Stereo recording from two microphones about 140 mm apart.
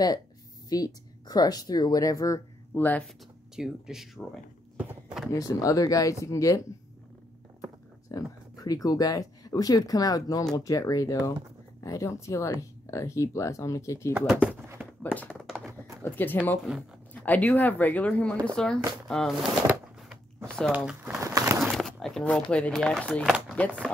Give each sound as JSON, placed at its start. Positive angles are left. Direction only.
{"t": 0.7, "sound": "speech", "side_deg": 25}
{"t": 3.5, "sound": "speech", "side_deg": -5}
{"t": 4.7, "sound": "a sound", "side_deg": -5}
{"t": 5.3, "sound": "speech", "side_deg": 25}
{"t": 8.1, "sound": "speech", "side_deg": 25}
{"t": 14.1, "sound": "speech", "side_deg": -5}
{"t": 15.1, "sound": "typing", "side_deg": 5}
{"t": 16.0, "sound": "speech", "side_deg": 15}
{"t": 20.4, "sound": "a sound", "side_deg": 5}
{"t": 20.7, "sound": "speech", "side_deg": -10}
{"t": 21.2, "sound": "bird", "side_deg": -20}
{"t": 21.5, "sound": "speech", "side_deg": 0}